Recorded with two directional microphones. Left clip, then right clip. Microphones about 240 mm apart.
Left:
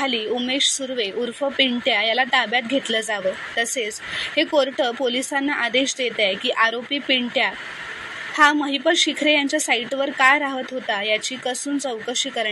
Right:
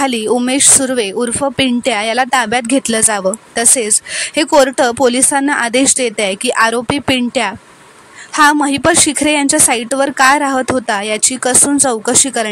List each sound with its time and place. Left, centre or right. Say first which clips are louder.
0.0 s a woman's voice: right 8 dB; right